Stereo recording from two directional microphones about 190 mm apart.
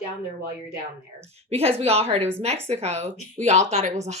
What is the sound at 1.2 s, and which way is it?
Speech, 35° right (ahead or behind).